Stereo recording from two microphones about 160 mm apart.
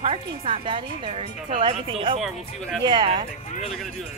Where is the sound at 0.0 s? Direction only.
35° right (ahead or behind).